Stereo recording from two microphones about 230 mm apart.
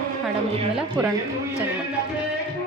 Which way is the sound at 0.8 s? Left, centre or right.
Centre.